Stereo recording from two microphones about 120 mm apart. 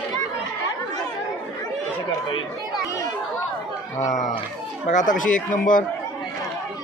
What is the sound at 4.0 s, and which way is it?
Speech, 85° left.